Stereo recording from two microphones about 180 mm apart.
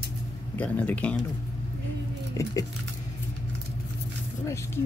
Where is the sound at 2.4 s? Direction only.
15° left (ahead or behind).